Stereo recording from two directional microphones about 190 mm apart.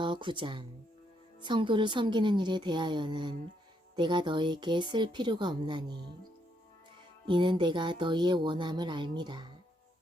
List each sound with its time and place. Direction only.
0.0 s speech: 25° right (ahead or behind)
7.3 s speech: 25° right (ahead or behind)